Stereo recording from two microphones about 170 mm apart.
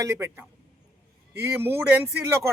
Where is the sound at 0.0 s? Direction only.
15° right (ahead or behind).